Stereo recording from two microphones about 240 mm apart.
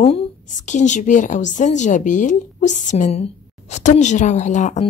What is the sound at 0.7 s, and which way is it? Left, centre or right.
A woman's voice, left.